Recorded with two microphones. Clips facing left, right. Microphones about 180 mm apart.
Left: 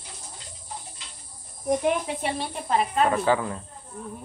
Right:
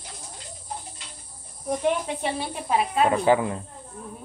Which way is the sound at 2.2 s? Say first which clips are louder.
Right 1 dB; 5° right (ahead or behind).